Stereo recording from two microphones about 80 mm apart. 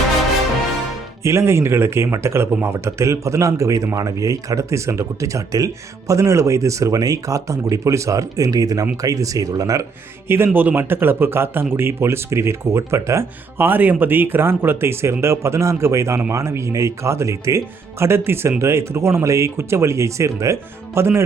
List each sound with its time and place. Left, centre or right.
1.2 s speech: right
10.2 s speech: right